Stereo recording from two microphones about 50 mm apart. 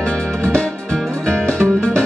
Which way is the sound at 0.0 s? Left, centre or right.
Left.